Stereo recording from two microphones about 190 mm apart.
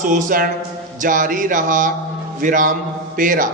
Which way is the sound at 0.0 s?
45° right (ahead or behind).